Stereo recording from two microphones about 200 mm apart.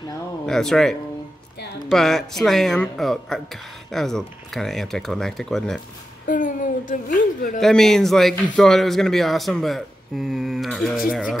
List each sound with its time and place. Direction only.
0.5 s a man's voice: centre (ahead or behind)
6.2 s speech: 40° left (ahead or behind)
7.6 s a man's voice: centre (ahead or behind)